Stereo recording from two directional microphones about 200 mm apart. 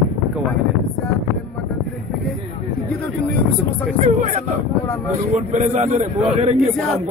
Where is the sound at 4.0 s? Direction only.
35° right (ahead or behind).